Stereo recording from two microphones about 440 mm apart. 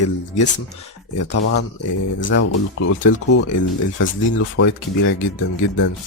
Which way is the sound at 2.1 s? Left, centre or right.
Left.